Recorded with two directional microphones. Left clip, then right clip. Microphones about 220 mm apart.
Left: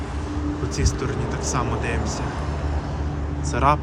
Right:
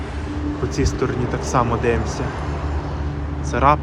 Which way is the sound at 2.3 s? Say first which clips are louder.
Right 2 dB; 55° left (ahead or behind).